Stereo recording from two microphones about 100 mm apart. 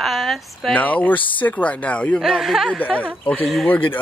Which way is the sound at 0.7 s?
15° left (ahead or behind).